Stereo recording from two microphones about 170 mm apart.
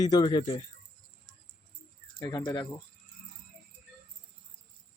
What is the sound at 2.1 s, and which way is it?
Speech, 25° left (ahead or behind).